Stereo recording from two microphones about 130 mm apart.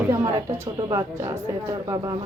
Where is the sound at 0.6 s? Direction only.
25° right (ahead or behind).